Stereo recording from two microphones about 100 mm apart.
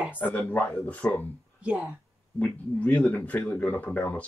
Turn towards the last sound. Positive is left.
turn(degrees=15)  # may be behind; listen again after turning